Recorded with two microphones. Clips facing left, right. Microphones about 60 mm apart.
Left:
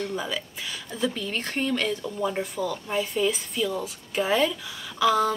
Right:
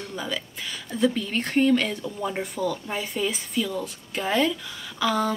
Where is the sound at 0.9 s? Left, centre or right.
Centre.